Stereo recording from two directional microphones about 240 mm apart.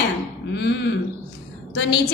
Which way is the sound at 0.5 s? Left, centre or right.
Left.